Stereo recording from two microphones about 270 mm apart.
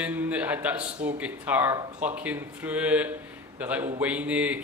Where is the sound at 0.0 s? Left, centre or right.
Centre.